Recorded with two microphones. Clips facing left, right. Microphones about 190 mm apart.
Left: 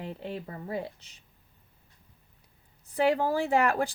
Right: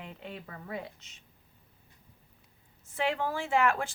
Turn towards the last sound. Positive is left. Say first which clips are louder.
# left 3 dB
turn(degrees=40)  # may be behind; listen again after turning